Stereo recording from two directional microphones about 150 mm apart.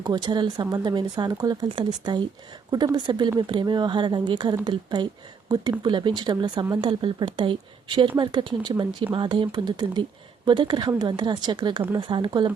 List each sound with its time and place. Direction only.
0.0 s speech: 30° right (ahead or behind)